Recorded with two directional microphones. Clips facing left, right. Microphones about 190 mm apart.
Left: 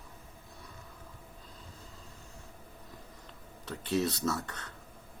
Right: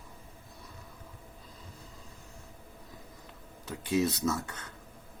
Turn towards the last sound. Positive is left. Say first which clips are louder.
# right 2 dB
turn(degrees=-5)  # may be behind; listen again after turning